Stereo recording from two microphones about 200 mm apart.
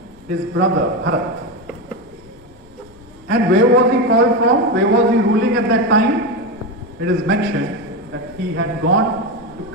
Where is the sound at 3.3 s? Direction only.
70° right (ahead or behind).